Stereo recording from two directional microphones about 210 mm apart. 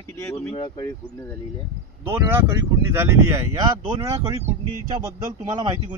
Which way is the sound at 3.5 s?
25° right (ahead or behind).